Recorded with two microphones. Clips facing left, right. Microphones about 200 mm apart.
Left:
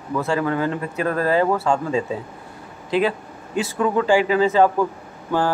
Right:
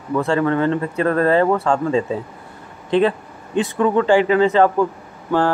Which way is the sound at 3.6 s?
5° left (ahead or behind).